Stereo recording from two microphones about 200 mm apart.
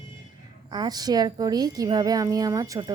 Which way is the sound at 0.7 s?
20° right (ahead or behind).